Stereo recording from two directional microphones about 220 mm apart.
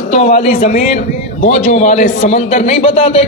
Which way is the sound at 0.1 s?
30° left (ahead or behind).